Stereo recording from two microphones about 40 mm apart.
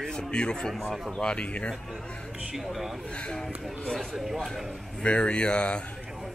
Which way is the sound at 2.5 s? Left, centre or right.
Centre.